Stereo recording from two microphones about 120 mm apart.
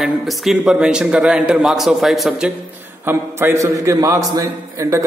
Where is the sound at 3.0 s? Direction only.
20° right (ahead or behind).